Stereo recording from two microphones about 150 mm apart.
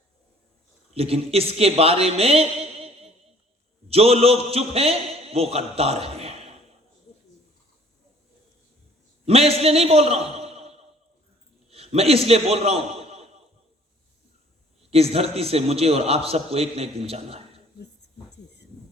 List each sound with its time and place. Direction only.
0.9 s a man's voice: 40° right (ahead or behind)
9.2 s a man's voice: 40° right (ahead or behind)
11.7 s a sound: 40° right (ahead or behind)
14.8 s a man's voice: 40° right (ahead or behind)